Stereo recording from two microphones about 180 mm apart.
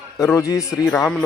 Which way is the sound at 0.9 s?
5° left (ahead or behind).